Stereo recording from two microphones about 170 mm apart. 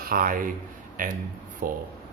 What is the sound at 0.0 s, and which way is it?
A man's voice, 55° right (ahead or behind).